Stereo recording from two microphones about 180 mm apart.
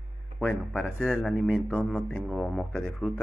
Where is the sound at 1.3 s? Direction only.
Centre (ahead or behind).